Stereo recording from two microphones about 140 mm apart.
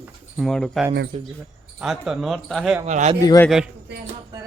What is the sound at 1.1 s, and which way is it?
Speech, 50° right (ahead or behind).